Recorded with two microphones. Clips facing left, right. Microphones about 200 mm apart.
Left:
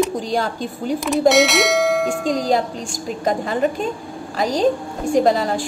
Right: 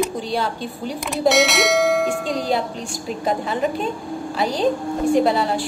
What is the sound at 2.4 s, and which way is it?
A woman's voice, 45° left (ahead or behind).